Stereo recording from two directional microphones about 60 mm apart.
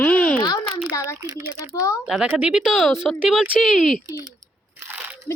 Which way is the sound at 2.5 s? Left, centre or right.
Centre.